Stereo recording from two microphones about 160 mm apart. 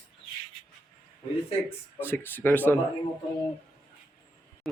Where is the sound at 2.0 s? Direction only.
10° left (ahead or behind).